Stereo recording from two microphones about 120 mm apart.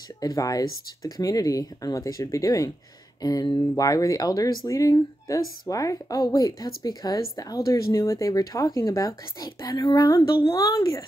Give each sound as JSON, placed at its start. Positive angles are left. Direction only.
{"t": 0.2, "sound": "speech", "side_deg": 30}